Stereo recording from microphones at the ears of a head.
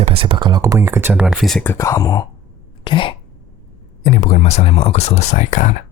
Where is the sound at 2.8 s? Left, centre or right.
Left.